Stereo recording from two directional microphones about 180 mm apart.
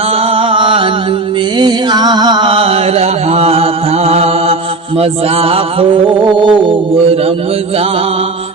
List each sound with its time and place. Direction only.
0.2 s a sound: 30° right (ahead or behind)
1.5 s music: 25° right (ahead or behind)
4.9 s mantra: 35° right (ahead or behind)
6.2 s music: 25° right (ahead or behind)